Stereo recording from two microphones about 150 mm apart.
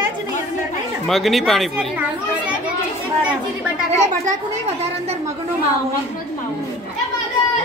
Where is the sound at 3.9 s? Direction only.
50° right (ahead or behind).